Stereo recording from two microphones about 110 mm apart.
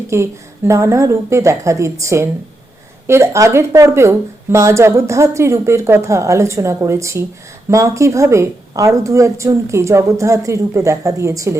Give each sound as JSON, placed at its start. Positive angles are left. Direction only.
{"t": 0.1, "sound": "speech", "side_deg": -25}